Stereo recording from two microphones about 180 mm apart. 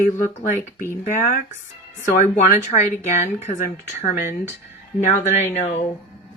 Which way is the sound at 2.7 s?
40° left (ahead or behind).